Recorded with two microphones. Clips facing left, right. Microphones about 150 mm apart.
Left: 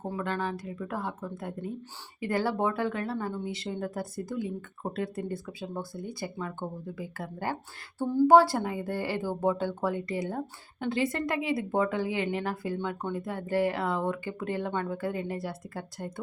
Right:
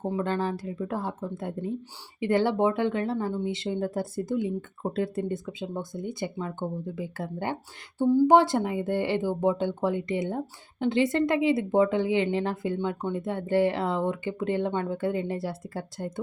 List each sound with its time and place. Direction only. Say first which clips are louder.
0.2 s speech: right 2 dB; 30° right (ahead or behind)